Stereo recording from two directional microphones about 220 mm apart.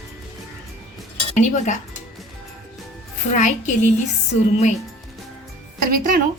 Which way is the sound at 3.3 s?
35° left (ahead or behind).